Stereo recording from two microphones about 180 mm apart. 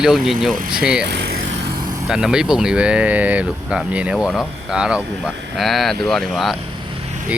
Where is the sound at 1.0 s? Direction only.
70° right (ahead or behind).